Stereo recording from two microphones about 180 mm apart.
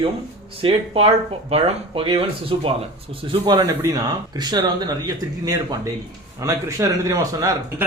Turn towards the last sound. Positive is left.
turn(degrees=-15)  # may be behind; listen again after turning